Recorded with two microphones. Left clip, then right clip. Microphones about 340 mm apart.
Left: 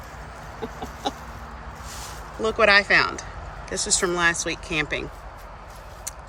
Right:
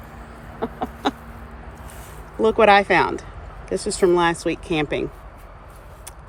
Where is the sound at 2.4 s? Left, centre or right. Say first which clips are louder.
Right 4 dB; centre.